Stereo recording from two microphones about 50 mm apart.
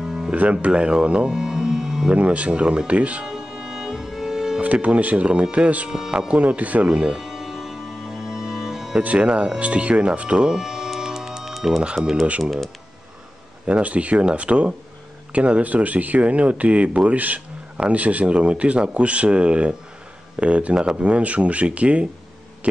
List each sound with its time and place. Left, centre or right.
0.0 s music: centre
0.4 s speech: right; by 2.0 s centre
2.0 s speech: right
3.3 s music: centre
4.8 s speech: right
5.9 s speech: centre
6.2 s music: right
9.0 s speech: right; by 11.8 s centre
11.8 s speech: centre
13.7 s speech: right